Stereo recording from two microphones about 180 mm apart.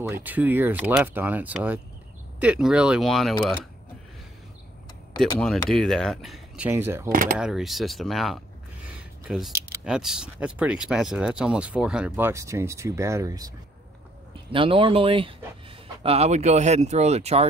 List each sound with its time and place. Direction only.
0.1 s speech: 10° right (ahead or behind)
5.4 s speech: 5° left (ahead or behind); by 7.1 s 15° right (ahead or behind)
7.1 s speech: 50° right (ahead or behind)
7.3 s speech: 5° right (ahead or behind)
14.5 s speech: 30° right (ahead or behind)